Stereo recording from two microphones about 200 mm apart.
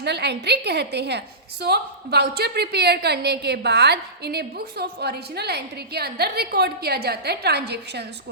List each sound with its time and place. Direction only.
0.0 s a woman's voice: 55° right (ahead or behind)